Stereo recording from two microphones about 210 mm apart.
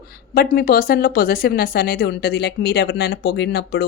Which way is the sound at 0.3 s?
45° left (ahead or behind).